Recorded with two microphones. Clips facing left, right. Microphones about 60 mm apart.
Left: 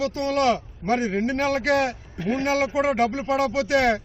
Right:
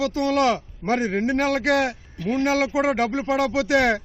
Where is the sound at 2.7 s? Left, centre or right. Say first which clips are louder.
Even; centre.